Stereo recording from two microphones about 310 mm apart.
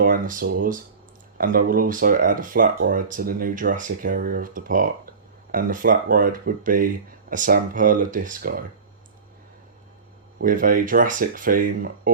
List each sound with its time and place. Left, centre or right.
0.0 s a sound: right
1.4 s speech: right
10.4 s speech: right